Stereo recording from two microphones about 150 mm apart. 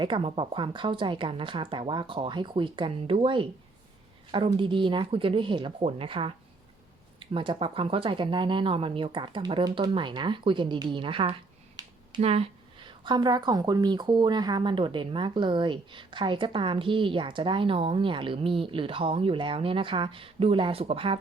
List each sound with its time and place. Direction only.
0.0 s a woman's voice: 35° right (ahead or behind)
11.8 s a sound: 25° right (ahead or behind)
12.1 s a woman's voice: 40° right (ahead or behind)